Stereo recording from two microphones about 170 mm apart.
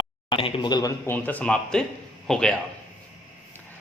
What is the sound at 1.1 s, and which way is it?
Speech, 10° left (ahead or behind).